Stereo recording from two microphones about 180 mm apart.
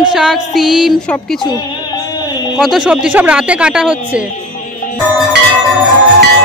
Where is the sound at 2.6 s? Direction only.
5° right (ahead or behind).